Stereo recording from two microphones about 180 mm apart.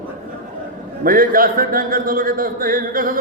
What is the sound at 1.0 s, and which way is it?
A man's voice, 50° right (ahead or behind).